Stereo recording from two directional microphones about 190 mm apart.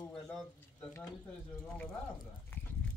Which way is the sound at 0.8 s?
15° left (ahead or behind).